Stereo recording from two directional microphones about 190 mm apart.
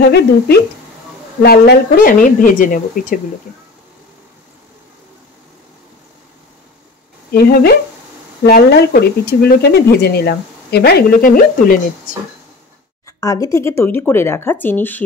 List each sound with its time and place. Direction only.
1.4 s speech: 55° left (ahead or behind)
7.2 s speech: 55° left (ahead or behind)
13.0 s speech: 15° left (ahead or behind)